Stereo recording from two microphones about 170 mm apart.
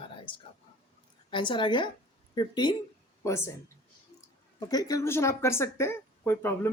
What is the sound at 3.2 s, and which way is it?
Speech, 15° left (ahead or behind).